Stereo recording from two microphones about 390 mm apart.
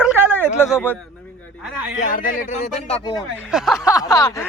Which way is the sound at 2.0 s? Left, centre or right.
Left.